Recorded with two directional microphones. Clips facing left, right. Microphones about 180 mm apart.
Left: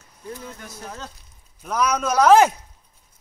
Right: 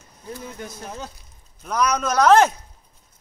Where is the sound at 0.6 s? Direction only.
15° right (ahead or behind).